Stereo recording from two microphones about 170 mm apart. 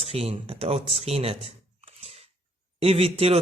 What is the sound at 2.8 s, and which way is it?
Speech, 35° right (ahead or behind).